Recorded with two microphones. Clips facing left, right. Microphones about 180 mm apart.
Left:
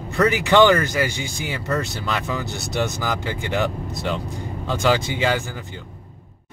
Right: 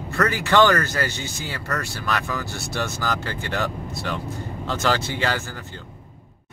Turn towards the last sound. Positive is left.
turn(degrees=15)  # may be behind; listen again after turning